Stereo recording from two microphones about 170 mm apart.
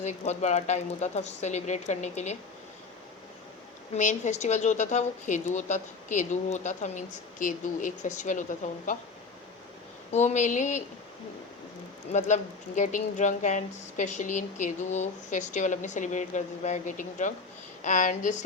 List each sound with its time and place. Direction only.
0.0 s speech: 45° left (ahead or behind)
3.9 s speech: 45° left (ahead or behind)
10.1 s speech: 45° left (ahead or behind)
12.1 s speech: 45° left (ahead or behind)